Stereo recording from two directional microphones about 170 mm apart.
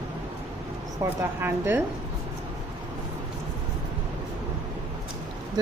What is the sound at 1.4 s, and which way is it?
Speech, 15° right (ahead or behind).